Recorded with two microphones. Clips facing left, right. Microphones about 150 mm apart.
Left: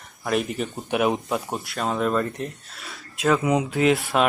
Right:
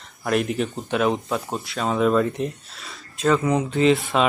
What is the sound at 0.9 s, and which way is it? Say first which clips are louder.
Speech: even; 15° left (ahead or behind).